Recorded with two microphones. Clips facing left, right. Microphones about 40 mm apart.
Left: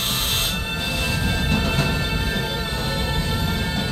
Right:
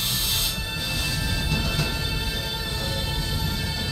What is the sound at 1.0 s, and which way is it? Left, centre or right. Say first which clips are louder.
Music: left 5 dB; left.